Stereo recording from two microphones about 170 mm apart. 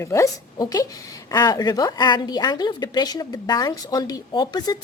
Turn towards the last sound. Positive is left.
turn(degrees=25)  # may be behind; listen again after turning